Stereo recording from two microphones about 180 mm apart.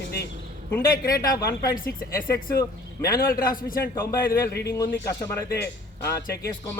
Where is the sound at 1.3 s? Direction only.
55° left (ahead or behind).